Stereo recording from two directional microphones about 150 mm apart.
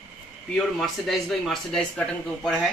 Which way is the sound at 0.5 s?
Centre (ahead or behind).